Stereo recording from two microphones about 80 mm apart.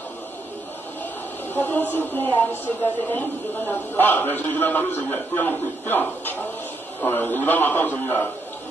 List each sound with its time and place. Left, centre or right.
1.5 s a man's voice: left